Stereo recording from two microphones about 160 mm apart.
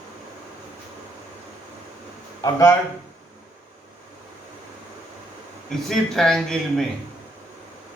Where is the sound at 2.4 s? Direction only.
20° left (ahead or behind).